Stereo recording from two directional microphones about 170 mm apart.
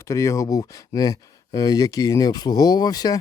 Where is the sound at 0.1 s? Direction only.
15° left (ahead or behind).